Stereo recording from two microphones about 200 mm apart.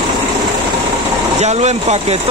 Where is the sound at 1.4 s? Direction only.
35° right (ahead or behind).